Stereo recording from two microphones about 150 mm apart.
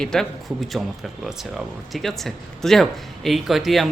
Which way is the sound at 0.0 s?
5° left (ahead or behind).